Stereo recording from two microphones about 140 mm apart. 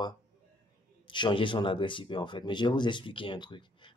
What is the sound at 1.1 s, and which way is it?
Speech, 35° left (ahead or behind).